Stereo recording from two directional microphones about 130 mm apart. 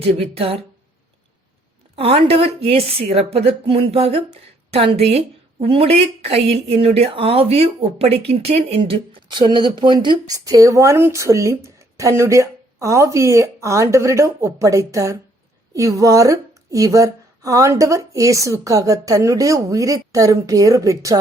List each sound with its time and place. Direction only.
0.0 s a woman's voice: 50° right (ahead or behind)
2.0 s a woman's voice: 45° right (ahead or behind); by 21.2 s 25° right (ahead or behind)